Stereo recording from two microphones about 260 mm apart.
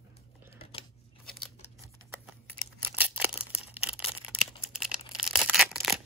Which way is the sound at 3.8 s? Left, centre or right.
Centre.